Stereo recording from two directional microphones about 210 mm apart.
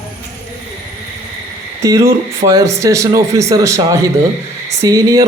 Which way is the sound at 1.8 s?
15° right (ahead or behind).